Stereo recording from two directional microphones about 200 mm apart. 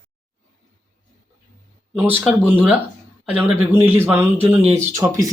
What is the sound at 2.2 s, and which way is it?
Speech, 5° right (ahead or behind).